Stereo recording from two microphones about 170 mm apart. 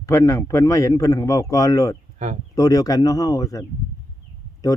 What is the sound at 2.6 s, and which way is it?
Speech, 20° left (ahead or behind).